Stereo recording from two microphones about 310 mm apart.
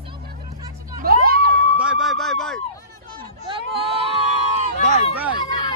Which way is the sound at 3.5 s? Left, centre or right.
Centre.